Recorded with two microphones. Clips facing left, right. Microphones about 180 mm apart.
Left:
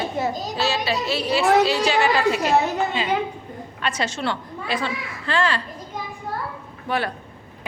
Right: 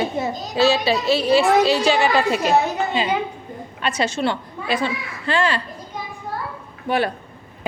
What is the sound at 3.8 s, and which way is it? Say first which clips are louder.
A woman's voice: right 4 dB; 25° right (ahead or behind).